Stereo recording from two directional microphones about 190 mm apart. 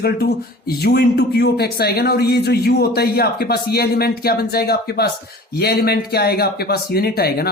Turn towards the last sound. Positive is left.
turn(degrees=55)  # may be behind; listen again after turning